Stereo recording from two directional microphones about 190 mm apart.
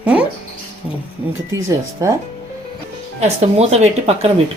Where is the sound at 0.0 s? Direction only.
5° right (ahead or behind).